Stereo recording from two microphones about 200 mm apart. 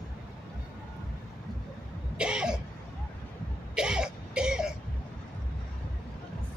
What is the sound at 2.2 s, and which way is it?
Cough, 5° right (ahead or behind).